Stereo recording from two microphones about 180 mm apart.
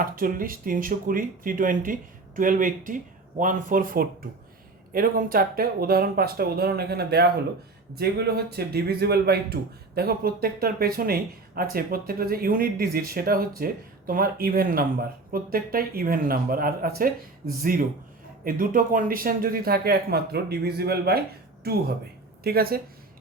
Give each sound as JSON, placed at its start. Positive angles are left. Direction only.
{"t": 0.0, "sound": "speech", "side_deg": -50}